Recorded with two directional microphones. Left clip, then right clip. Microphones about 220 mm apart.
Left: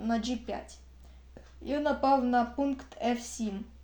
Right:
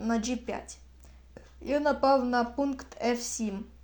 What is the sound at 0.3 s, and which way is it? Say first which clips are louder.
Speech: right 2 dB; 35° right (ahead or behind).